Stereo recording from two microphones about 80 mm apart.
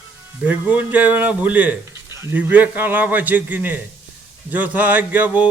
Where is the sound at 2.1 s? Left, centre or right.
Right.